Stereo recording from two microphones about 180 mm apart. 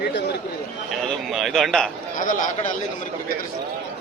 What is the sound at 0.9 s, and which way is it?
Speech, centre (ahead or behind).